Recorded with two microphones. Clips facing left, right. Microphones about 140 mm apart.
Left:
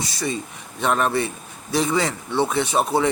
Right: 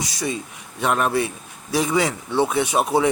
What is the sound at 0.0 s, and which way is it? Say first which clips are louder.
Speech: even; 15° right (ahead or behind).